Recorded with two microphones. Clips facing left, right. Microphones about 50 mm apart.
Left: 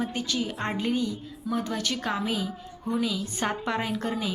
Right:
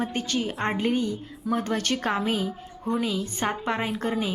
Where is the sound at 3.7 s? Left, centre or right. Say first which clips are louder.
Right 2 dB; right.